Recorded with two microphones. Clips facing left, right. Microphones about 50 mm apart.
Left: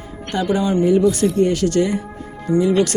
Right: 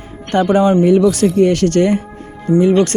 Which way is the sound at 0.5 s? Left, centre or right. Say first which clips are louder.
Right 6 dB; right.